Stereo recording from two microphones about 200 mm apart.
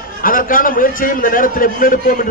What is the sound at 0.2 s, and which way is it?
A man's voice, 45° left (ahead or behind).